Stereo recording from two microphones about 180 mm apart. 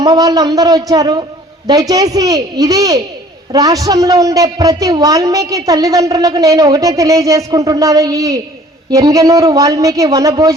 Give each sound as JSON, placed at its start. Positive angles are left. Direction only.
{"t": 0.0, "sound": "a man's voice", "side_deg": -20}